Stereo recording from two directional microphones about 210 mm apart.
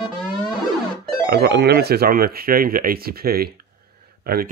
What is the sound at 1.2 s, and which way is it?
Speech, 50° right (ahead or behind).